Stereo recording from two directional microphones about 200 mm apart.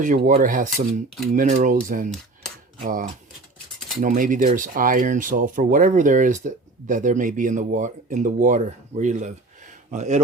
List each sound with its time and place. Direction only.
0.0 s speech: 40° right (ahead or behind)